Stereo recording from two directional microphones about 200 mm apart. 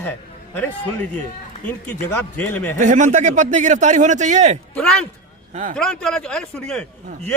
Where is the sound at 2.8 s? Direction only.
35° right (ahead or behind).